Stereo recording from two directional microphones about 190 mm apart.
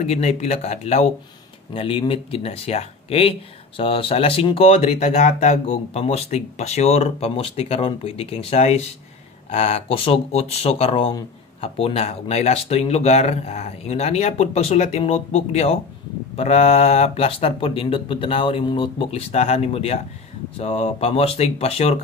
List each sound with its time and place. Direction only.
0.0 s speech: 35° left (ahead or behind)